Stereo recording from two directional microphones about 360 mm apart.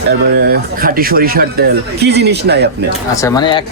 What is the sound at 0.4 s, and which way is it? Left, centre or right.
Speech, right.